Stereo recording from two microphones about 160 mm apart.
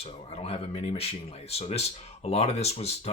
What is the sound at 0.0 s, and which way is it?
Speech, 40° left (ahead or behind).